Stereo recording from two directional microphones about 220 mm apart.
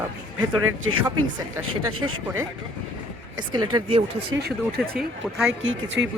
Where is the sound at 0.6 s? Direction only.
70° right (ahead or behind).